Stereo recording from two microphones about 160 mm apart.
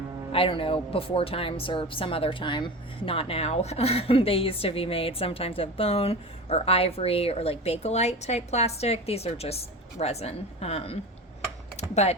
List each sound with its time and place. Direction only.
0.3 s a woman's voice: 35° left (ahead or behind)